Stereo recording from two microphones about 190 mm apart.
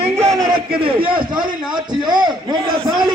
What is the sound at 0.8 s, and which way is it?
Speech, 25° right (ahead or behind).